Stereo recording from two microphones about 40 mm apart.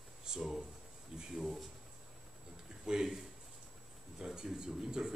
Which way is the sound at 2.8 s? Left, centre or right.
Centre.